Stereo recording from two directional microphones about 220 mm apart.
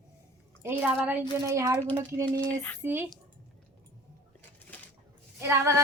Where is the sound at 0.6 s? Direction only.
5° right (ahead or behind).